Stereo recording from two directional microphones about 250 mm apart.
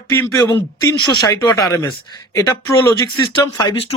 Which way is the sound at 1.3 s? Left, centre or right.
Centre.